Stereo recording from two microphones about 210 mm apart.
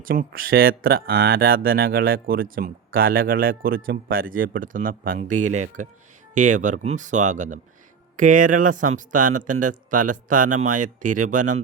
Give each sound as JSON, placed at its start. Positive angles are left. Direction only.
{"t": 0.0, "sound": "speech", "side_deg": -40}